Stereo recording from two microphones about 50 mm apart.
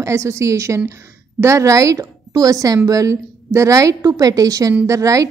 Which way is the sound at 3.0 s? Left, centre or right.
Right.